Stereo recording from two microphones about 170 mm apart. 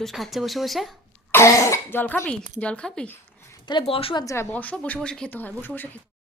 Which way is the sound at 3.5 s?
25° left (ahead or behind).